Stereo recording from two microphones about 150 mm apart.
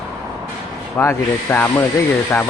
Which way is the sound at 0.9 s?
15° left (ahead or behind).